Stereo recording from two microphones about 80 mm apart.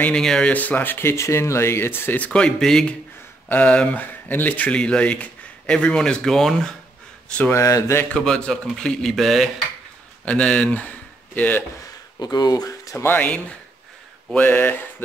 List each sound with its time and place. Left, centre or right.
0.0 s speech: centre
0.5 s speech: centre
7.4 s speech: left
8.1 s speech: centre
10.2 s speech: centre
12.2 s speech: left
13.0 s speech: left
14.3 s speech: left